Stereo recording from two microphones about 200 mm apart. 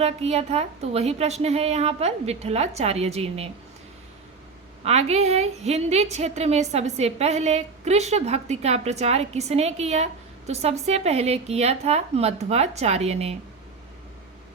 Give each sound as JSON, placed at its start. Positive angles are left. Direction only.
{"t": 0.0, "sound": "a woman's voice", "side_deg": -30}
{"t": 4.9, "sound": "a woman's voice", "side_deg": -30}